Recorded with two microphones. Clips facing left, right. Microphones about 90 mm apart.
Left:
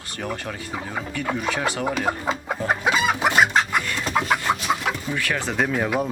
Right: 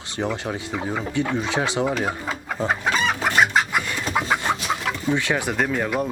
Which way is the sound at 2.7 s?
10° left (ahead or behind).